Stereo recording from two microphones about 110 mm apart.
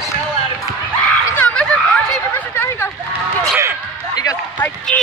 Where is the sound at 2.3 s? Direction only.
20° left (ahead or behind).